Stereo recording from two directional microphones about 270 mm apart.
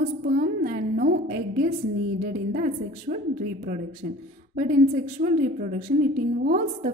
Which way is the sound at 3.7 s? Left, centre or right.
Right.